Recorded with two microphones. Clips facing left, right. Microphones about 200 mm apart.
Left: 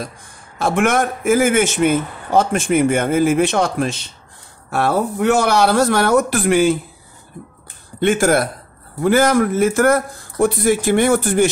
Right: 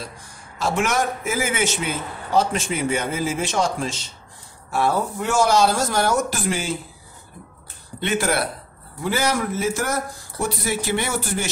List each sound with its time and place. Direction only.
0.6 s a man's voice: 55° left (ahead or behind)
8.0 s a man's voice: 50° left (ahead or behind)